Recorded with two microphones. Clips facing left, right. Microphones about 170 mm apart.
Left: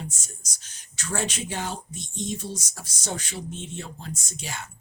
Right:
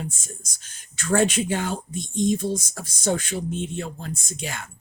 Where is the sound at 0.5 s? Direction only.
50° right (ahead or behind).